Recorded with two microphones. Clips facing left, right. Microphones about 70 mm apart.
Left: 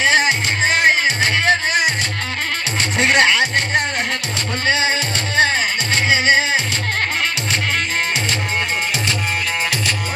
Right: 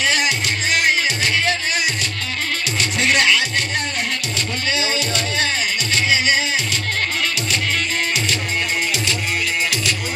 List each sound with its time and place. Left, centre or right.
0.0 s music: left
3.0 s music: left